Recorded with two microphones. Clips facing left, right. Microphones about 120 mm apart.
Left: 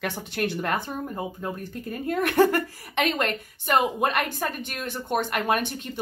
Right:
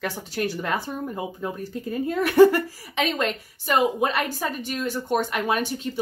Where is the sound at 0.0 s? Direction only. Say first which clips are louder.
Right 1 dB; 60° left (ahead or behind).